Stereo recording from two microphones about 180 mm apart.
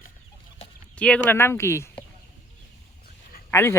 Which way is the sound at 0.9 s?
5° left (ahead or behind).